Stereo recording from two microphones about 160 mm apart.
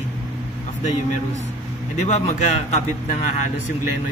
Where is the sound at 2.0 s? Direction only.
45° left (ahead or behind).